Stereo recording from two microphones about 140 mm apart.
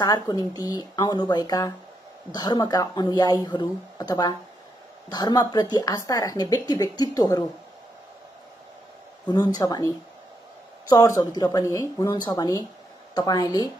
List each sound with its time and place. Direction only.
0.0 s speech: 30° left (ahead or behind)
9.3 s speech: 30° left (ahead or behind)